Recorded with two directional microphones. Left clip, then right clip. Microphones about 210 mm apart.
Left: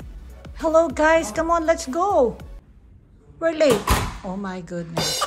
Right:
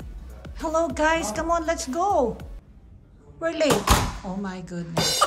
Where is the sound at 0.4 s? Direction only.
5° right (ahead or behind).